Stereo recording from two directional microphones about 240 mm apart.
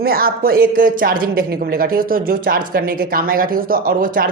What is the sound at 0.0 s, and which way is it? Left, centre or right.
A woman's voice, right.